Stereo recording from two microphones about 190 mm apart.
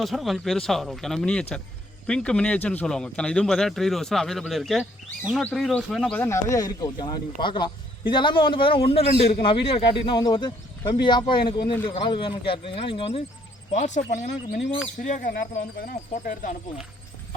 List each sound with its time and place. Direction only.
0.0 s a man's voice: centre (ahead or behind); by 13.2 s 30° left (ahead or behind)
13.7 s speech: 40° left (ahead or behind)